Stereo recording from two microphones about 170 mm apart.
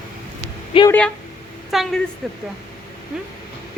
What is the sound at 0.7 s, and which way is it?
Speech, 30° left (ahead or behind).